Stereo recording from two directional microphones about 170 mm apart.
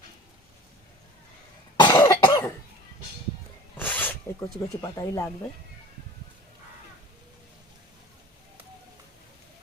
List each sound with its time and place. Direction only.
1.7 s cough: 25° left (ahead or behind)
3.8 s zipper: 10° left (ahead or behind)